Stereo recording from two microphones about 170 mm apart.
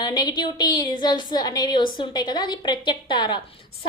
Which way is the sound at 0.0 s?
25° left (ahead or behind).